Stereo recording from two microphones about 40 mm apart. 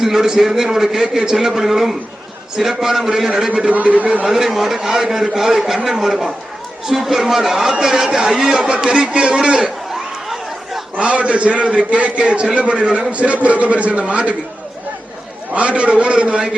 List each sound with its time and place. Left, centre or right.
0.0 s a man's voice: centre
3.7 s a man's voice: right
4.3 s a man's voice: centre; by 9.6 s right
10.9 s a man's voice: right
15.5 s a man's voice: right